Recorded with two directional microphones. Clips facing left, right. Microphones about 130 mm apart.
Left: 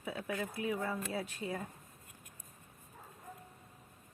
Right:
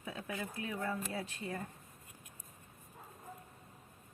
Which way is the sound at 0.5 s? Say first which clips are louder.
Left 1 dB; 10° left (ahead or behind).